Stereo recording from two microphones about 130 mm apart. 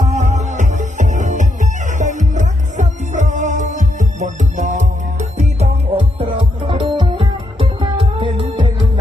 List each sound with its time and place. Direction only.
0.0 s music: 60° right (ahead or behind)
5.4 s music: 55° right (ahead or behind)
6.1 s music: 40° right (ahead or behind)